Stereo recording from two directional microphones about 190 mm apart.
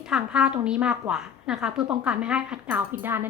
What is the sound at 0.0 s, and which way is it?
A woman's voice, 5° right (ahead or behind).